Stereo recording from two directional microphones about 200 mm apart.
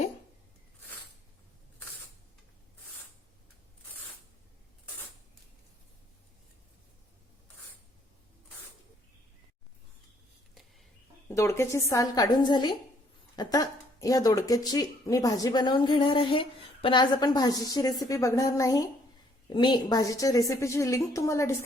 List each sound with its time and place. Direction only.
11.3 s a woman's voice: 15° left (ahead or behind)